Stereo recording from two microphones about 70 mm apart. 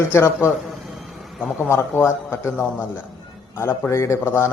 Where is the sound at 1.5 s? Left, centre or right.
Left.